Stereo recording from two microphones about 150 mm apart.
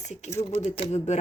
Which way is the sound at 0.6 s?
45° left (ahead or behind).